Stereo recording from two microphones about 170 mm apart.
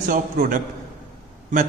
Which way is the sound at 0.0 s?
50° right (ahead or behind).